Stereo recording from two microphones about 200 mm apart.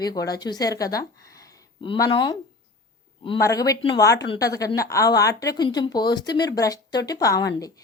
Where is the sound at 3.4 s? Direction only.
15° left (ahead or behind).